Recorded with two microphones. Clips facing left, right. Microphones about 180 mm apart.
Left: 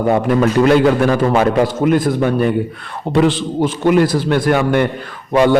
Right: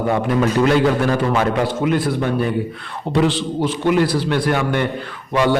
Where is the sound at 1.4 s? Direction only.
50° left (ahead or behind).